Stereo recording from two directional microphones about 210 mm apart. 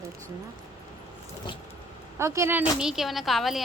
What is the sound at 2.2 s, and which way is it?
A woman's voice, 15° right (ahead or behind).